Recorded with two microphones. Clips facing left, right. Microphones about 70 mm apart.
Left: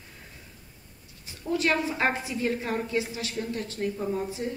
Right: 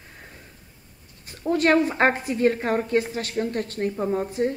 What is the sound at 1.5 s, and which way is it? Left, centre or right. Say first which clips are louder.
A woman's voice: right 6 dB; right.